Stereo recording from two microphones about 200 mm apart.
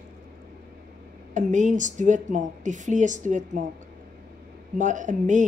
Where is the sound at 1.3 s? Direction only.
40° right (ahead or behind).